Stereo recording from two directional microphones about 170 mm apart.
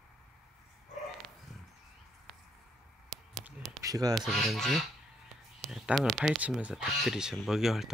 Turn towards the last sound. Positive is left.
turn(degrees=0)  # may be behind; listen again after turning